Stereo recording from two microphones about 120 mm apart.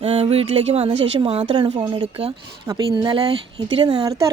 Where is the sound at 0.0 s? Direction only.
60° right (ahead or behind).